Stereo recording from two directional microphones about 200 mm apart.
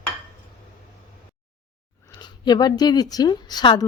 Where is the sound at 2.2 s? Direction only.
20° left (ahead or behind).